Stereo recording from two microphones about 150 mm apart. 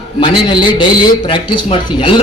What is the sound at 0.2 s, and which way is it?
A man's voice, 30° left (ahead or behind).